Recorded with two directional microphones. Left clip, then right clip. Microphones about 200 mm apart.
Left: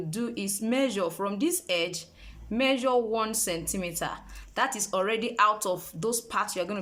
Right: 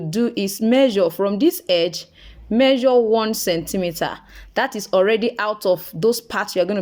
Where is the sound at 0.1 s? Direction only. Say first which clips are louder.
Right 12 dB; 30° right (ahead or behind).